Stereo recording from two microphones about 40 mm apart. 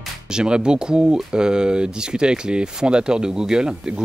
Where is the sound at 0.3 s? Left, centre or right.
Right.